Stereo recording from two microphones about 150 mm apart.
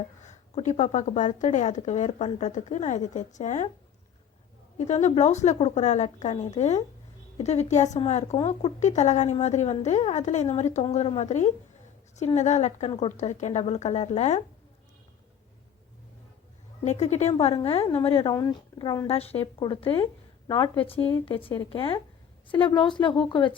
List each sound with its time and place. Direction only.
0.2 s a woman's voice: 50° left (ahead or behind)
4.8 s a woman's voice: 50° left (ahead or behind)
16.8 s a woman's voice: 50° left (ahead or behind)
18.3 s speech: 25° left (ahead or behind)
19.0 s a woman's voice: 40° left (ahead or behind)